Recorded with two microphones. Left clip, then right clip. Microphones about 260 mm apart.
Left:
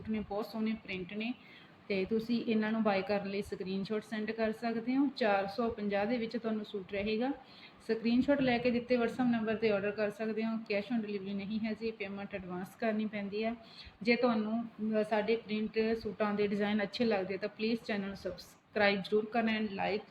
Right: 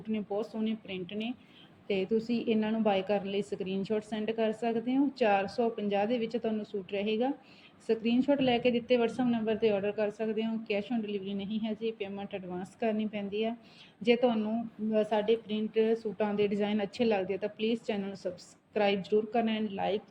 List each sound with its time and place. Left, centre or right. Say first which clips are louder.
0.1 s a woman's voice: right 4 dB; left
1.9 s a woman's voice: right 3 dB; left